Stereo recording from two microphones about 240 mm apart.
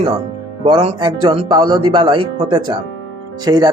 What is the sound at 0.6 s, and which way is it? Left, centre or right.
Speech, right.